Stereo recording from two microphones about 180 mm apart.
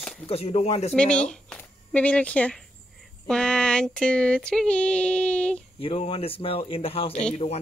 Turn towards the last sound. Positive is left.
turn(degrees=35)  # may be behind; listen again after turning